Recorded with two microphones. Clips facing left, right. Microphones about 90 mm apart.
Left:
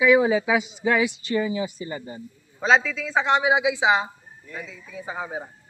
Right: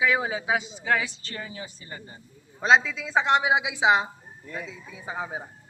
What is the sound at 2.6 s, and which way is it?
A woman's voice, 5° right (ahead or behind).